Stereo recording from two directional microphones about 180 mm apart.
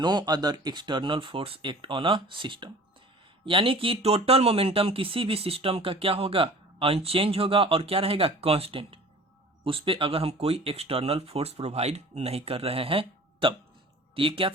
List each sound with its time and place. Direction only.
0.0 s speech: 25° right (ahead or behind)